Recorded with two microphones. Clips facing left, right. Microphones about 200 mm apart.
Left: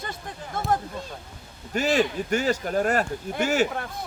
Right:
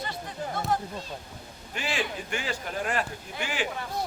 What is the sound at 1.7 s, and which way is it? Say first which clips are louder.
Speech: left 9 dB; 40° left (ahead or behind).